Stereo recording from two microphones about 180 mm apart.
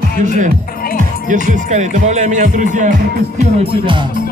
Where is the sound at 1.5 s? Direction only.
40° right (ahead or behind).